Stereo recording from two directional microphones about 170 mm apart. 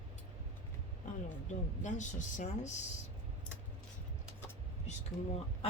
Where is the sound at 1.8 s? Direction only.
45° left (ahead or behind).